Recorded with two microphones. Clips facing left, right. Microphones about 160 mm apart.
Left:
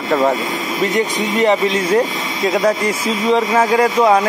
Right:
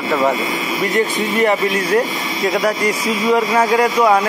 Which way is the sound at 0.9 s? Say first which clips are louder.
Right 3 dB; 20° left (ahead or behind).